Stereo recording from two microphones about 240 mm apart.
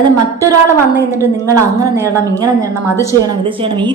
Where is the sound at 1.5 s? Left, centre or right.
Centre.